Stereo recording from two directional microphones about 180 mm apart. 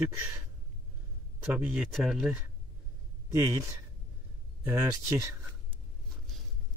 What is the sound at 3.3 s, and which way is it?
Speech, 15° right (ahead or behind).